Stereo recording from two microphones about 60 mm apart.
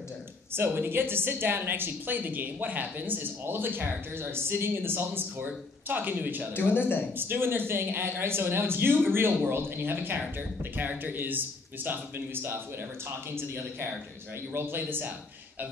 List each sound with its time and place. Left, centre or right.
0.6 s a woman's voice: right
6.5 s speech: left
7.2 s a woman's voice: right